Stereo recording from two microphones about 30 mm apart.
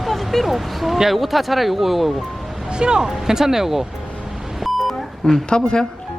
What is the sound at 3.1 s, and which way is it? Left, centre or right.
Vehicle, centre.